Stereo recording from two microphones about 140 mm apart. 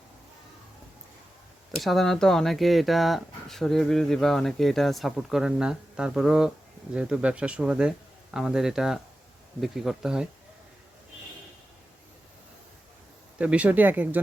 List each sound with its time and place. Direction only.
1.8 s speech: centre (ahead or behind)
13.4 s speech: 10° right (ahead or behind)